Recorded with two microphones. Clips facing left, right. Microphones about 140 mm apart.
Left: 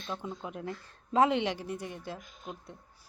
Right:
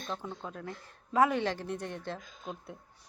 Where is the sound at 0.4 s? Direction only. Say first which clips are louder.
Left 3 dB; 20° left (ahead or behind); by 2.7 s centre (ahead or behind).